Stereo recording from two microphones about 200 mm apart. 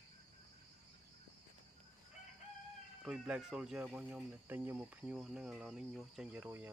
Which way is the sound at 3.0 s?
5° right (ahead or behind).